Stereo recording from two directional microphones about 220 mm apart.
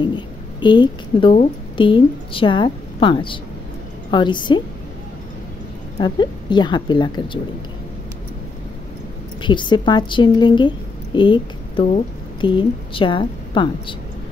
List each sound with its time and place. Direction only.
0.0 s a sound: 20° left (ahead or behind)
1.3 s a woman's voice: 25° left (ahead or behind)
5.9 s a woman's voice: 20° left (ahead or behind)
9.4 s a woman's voice: 20° left (ahead or behind)